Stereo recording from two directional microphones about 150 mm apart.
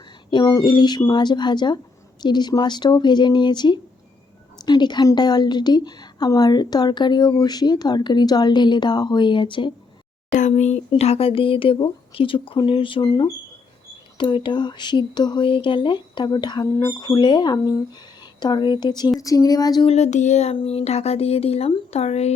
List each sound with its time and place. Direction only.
0.3 s a woman's voice: 25° left (ahead or behind)
10.3 s a woman's voice: 55° left (ahead or behind); by 19.9 s 25° left (ahead or behind)
19.9 s speech: 50° left (ahead or behind)